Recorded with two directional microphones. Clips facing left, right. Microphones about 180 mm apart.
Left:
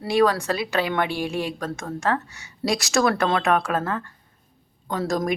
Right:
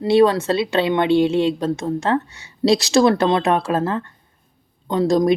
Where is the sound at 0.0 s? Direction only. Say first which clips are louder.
Right 6 dB; 25° right (ahead or behind).